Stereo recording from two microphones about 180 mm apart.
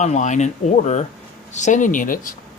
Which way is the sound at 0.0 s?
40° left (ahead or behind).